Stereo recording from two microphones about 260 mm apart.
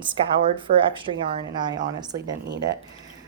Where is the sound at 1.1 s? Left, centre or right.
Right.